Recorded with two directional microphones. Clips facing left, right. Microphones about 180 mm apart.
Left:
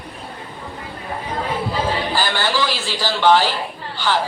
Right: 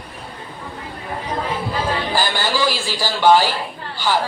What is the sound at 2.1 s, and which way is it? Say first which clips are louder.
A woman's voice: right 2 dB; 10° right (ahead or behind).